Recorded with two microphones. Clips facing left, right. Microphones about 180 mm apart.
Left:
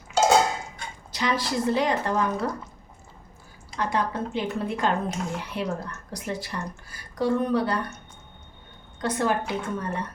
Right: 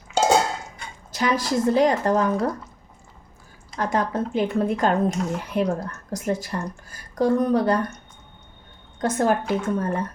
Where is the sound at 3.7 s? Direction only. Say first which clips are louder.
Right 3 dB; 45° right (ahead or behind).